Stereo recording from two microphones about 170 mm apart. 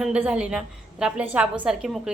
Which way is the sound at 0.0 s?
5° right (ahead or behind).